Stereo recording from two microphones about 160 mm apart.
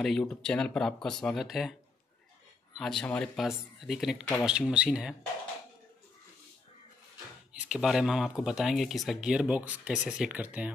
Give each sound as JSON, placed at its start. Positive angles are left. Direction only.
{"t": 0.0, "sound": "speech", "side_deg": 5}
{"t": 2.8, "sound": "speech", "side_deg": 5}
{"t": 7.5, "sound": "speech", "side_deg": -5}